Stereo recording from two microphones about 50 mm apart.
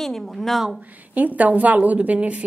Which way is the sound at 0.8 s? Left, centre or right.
Right.